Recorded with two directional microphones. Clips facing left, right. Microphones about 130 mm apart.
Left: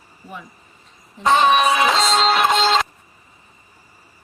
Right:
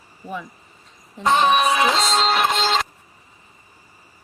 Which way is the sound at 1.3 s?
90° left.